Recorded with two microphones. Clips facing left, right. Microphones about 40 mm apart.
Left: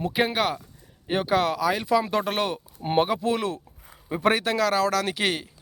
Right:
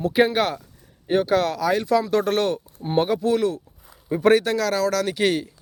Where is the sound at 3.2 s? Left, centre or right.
Left.